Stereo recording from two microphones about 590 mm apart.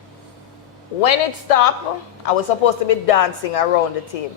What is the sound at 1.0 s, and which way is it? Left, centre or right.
Speech, left.